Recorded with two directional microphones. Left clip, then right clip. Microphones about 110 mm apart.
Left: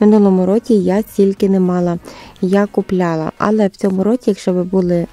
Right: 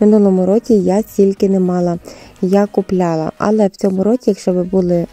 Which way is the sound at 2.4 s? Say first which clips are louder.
Right 1 dB; 15° left (ahead or behind).